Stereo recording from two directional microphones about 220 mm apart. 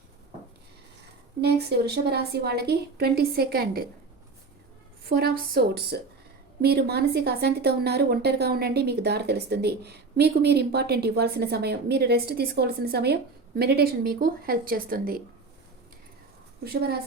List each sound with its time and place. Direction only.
1.4 s speech: 45° right (ahead or behind)
5.0 s speech: 45° right (ahead or behind)
16.6 s speech: 45° right (ahead or behind)